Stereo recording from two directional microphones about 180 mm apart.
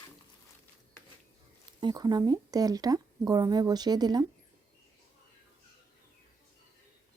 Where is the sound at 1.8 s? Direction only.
25° right (ahead or behind).